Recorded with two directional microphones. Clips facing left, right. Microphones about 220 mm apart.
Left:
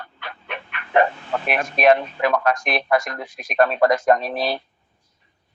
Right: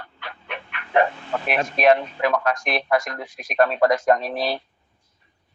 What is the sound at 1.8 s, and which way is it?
Speech, 55° left (ahead or behind).